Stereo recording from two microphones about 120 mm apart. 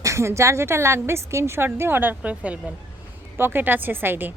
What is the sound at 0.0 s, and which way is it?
A woman's voice, 25° right (ahead or behind).